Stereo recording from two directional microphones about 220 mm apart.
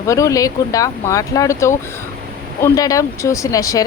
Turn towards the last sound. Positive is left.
turn(degrees=15)  # may be behind; listen again after turning